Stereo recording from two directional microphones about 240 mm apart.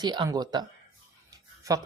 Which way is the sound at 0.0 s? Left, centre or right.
Centre.